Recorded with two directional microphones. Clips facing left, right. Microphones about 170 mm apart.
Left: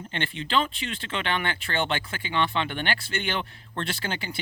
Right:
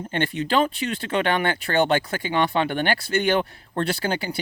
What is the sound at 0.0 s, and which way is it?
Speech, 40° right (ahead or behind).